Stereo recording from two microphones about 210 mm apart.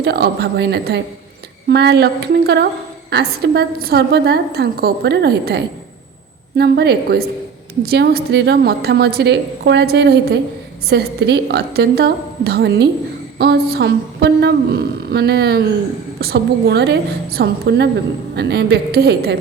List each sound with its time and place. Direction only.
0.0 s a woman's voice: 50° right (ahead or behind)